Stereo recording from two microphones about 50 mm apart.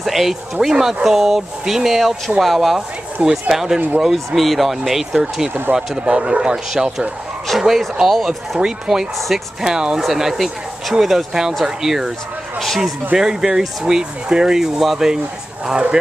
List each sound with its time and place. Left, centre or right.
0.0 s speech: centre
13.1 s speech: centre